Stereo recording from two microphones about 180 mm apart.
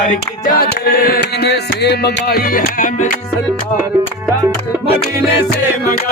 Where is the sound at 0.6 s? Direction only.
60° left (ahead or behind).